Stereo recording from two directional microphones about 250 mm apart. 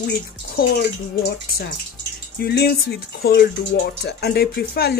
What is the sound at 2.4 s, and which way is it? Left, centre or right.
Speech, left.